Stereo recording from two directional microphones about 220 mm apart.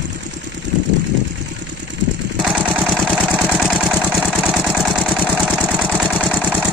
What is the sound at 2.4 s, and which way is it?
Vehicle, centre (ahead or behind).